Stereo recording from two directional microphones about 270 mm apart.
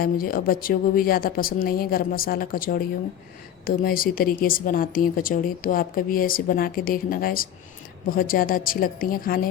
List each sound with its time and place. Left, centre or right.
0.0 s a woman's voice: left